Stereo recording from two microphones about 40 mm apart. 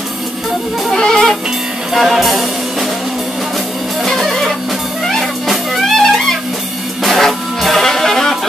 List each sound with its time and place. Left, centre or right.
0.9 s music: centre
2.0 s music: centre
4.3 s music: centre